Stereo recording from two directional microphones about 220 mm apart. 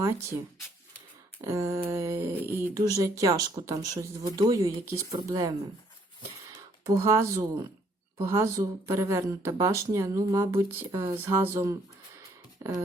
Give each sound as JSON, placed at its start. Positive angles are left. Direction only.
{"t": 1.4, "sound": "speech", "side_deg": -15}
{"t": 6.8, "sound": "speech", "side_deg": -15}